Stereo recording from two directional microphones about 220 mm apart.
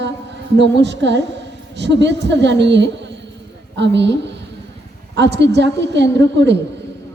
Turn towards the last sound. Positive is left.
turn(degrees=-50)  # may be behind; listen again after turning